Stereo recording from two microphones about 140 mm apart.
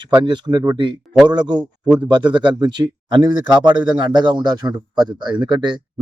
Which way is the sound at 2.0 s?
35° right (ahead or behind).